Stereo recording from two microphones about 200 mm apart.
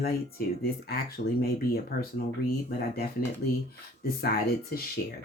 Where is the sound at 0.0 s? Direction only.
50° left (ahead or behind).